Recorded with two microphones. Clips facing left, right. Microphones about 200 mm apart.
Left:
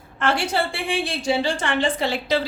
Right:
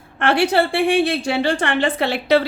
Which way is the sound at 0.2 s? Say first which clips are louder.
Right 6 dB; 65° right (ahead or behind).